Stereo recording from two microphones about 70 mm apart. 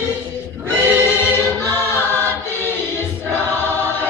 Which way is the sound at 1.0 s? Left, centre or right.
Left.